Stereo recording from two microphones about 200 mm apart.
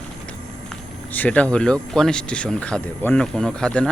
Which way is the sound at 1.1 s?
5° left (ahead or behind).